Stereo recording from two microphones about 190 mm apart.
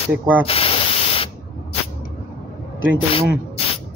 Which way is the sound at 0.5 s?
30° left (ahead or behind).